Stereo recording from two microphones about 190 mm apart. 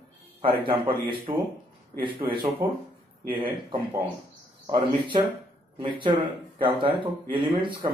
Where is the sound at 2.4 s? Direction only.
10° right (ahead or behind).